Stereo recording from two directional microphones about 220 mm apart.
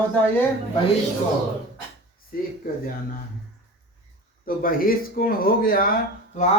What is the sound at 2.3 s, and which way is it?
Speech, 40° left (ahead or behind).